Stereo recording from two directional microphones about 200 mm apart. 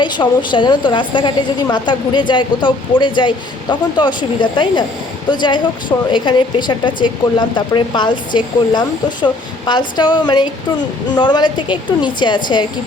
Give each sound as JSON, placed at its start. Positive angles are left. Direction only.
{"t": 0.0, "sound": "a woman's voice", "side_deg": 25}